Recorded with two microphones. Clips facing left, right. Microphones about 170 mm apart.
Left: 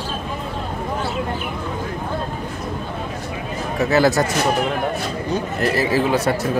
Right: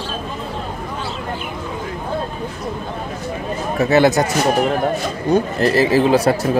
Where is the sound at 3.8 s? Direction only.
25° right (ahead or behind).